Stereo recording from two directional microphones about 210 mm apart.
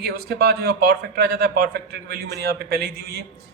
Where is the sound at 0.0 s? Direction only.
50° right (ahead or behind).